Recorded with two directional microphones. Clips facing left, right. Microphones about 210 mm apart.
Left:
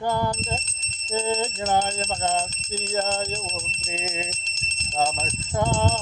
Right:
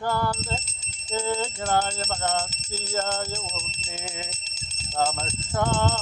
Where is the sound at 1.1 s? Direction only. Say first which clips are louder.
Left 2 dB; 15° left (ahead or behind).